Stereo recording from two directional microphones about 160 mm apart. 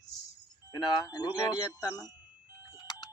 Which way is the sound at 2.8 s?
25° left (ahead or behind).